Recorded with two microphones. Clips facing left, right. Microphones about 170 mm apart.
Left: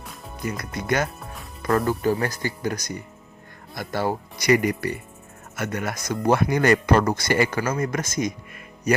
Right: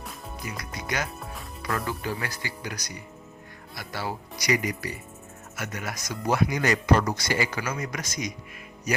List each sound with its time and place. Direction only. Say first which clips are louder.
0.0 s music: even; centre (ahead or behind)
0.4 s speech: left 9 dB; 55° left (ahead or behind)
1.2 s music: even; centre (ahead or behind)
1.9 s speech: left 9 dB; 45° left (ahead or behind)